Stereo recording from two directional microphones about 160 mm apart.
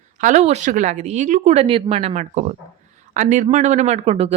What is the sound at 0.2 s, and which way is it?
Speech, 50° right (ahead or behind).